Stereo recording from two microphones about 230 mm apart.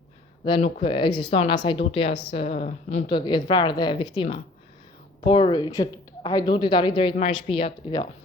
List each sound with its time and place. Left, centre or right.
0.4 s a woman's voice: left